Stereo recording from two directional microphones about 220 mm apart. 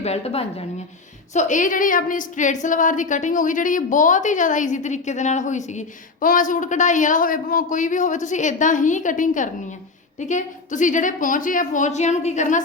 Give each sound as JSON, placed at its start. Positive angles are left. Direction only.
{"t": 0.0, "sound": "a woman's voice", "side_deg": 30}